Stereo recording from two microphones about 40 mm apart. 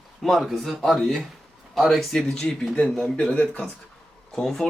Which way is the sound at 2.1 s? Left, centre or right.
Centre.